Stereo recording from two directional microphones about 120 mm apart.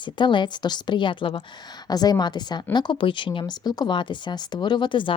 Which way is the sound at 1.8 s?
35° left (ahead or behind).